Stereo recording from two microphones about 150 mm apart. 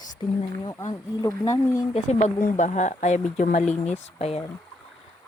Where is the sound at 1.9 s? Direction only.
45° left (ahead or behind).